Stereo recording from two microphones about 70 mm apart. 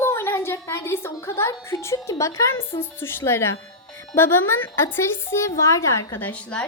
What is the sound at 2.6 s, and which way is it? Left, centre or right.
A woman's voice, left.